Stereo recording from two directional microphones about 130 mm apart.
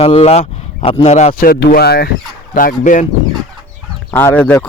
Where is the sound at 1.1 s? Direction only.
75° left (ahead or behind).